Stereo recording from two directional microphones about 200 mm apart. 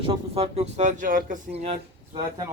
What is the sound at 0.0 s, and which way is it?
Speech, 25° right (ahead or behind).